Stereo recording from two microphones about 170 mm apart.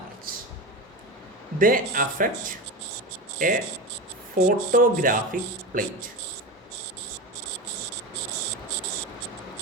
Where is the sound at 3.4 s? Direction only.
50° right (ahead or behind).